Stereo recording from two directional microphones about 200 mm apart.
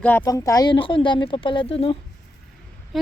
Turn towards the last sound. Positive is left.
turn(degrees=0)  # may be behind; listen again after turning